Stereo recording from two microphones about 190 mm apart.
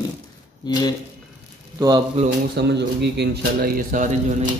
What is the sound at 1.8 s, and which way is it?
Speech, 20° right (ahead or behind).